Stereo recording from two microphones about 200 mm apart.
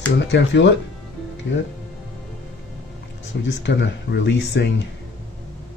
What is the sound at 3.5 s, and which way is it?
Speech, 60° left (ahead or behind).